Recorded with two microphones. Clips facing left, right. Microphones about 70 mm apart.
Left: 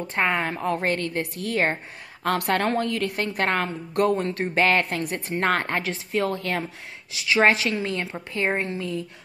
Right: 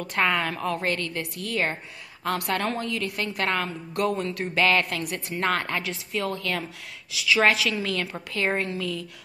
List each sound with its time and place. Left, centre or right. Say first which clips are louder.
0.0 s a woman's voice: even; left